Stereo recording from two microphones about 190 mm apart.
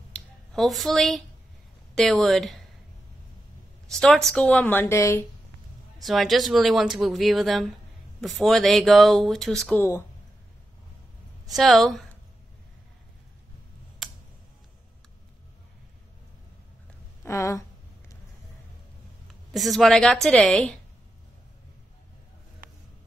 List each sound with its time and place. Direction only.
0.1 s a sound: centre (ahead or behind)
2.0 s speech: centre (ahead or behind)
3.9 s speech: centre (ahead or behind)
5.9 s speech: centre (ahead or behind)
11.4 s speech: centre (ahead or behind)
17.2 s speech: 15° left (ahead or behind)
19.5 s speech: centre (ahead or behind)